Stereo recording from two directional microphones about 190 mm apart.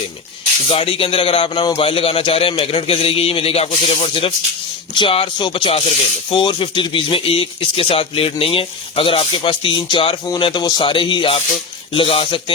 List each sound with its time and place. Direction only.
0.7 s speech: 30° left (ahead or behind)